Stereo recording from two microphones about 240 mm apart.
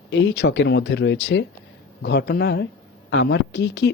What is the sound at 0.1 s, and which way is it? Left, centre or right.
Speech, left.